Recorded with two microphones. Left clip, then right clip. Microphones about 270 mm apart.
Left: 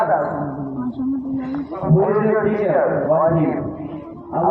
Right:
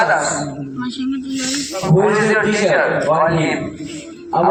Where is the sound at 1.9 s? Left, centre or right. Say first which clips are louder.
Right 3 dB; right.